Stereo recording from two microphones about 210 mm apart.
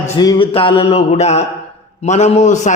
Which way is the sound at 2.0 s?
30° left (ahead or behind).